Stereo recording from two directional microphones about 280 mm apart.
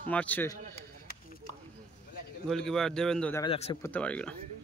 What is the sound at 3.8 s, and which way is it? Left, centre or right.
Speech, centre.